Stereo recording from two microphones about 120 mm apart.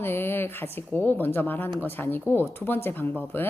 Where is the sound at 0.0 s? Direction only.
20° left (ahead or behind).